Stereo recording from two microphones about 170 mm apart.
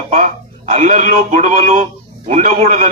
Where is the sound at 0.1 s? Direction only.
40° right (ahead or behind).